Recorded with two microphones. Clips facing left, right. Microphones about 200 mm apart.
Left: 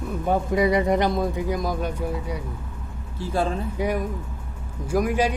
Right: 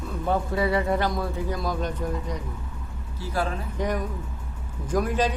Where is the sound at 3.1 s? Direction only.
25° left (ahead or behind).